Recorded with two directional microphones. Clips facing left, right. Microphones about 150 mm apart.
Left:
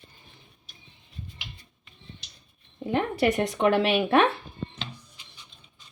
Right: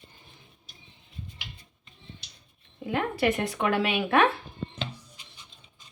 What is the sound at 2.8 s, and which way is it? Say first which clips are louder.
Speech: left 2 dB; 35° left (ahead or behind).